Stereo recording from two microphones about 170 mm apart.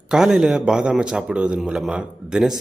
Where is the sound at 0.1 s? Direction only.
5° right (ahead or behind).